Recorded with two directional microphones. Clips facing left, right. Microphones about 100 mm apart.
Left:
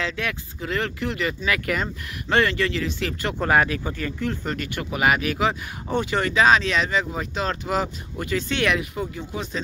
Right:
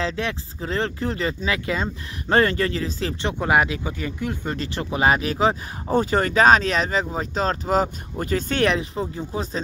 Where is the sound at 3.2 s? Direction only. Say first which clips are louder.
Even; 15° right (ahead or behind).